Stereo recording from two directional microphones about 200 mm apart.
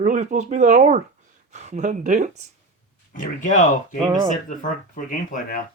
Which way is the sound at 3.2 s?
40° left (ahead or behind).